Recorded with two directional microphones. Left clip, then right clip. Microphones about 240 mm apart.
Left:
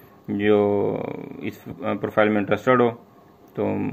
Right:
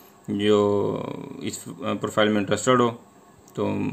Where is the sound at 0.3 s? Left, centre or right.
Right.